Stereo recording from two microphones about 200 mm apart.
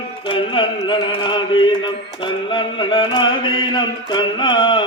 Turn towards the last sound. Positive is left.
turn(degrees=25)  # may be behind; listen again after turning